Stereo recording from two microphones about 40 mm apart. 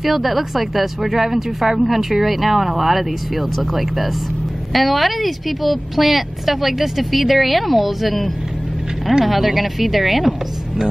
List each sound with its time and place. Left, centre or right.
0.0 s speech: centre